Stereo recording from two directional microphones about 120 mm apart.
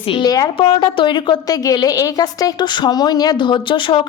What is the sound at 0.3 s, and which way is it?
Speech, 30° left (ahead or behind).